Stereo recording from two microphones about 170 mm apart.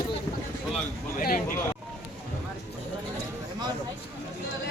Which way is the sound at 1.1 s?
55° left (ahead or behind).